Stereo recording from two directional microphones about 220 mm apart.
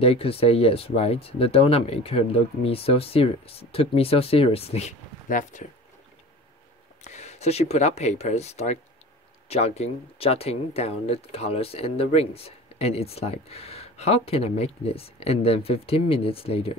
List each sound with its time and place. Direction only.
0.0 s speech: 25° left (ahead or behind)
7.1 s speech: 30° left (ahead or behind)